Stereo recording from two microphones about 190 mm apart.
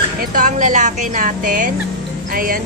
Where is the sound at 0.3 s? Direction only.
40° right (ahead or behind).